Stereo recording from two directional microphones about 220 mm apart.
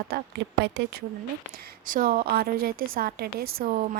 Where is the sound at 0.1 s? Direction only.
50° right (ahead or behind).